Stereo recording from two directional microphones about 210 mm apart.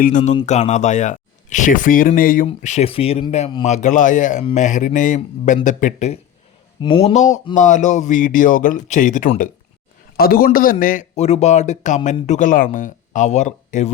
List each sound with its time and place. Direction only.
0.0 s speech: 35° left (ahead or behind)